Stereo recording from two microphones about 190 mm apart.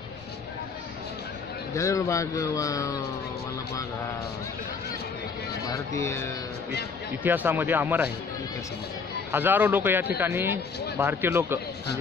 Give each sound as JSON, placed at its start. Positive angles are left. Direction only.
{"t": 1.8, "sound": "speech", "side_deg": 15}
{"t": 5.7, "sound": "speech", "side_deg": 15}
{"t": 7.2, "sound": "a man's voice", "side_deg": -10}
{"t": 9.3, "sound": "a man's voice", "side_deg": -10}